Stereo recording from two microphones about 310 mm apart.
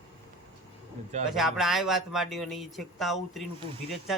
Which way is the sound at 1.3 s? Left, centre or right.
Centre.